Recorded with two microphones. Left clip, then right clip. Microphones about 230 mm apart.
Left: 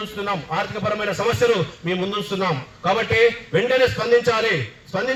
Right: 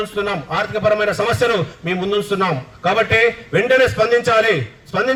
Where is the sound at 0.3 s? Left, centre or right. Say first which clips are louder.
Right 3 dB; right.